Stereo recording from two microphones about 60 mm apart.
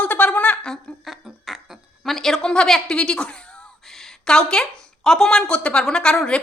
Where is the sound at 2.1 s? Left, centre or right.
Centre.